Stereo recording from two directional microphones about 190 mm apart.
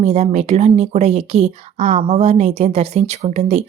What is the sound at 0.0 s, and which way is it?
Speech, 35° right (ahead or behind).